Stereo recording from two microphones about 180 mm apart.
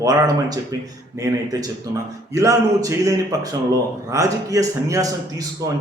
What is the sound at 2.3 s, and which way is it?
A man's voice, 15° right (ahead or behind).